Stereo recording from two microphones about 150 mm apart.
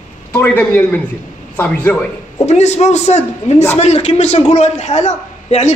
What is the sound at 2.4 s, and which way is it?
A man's voice, 50° left (ahead or behind).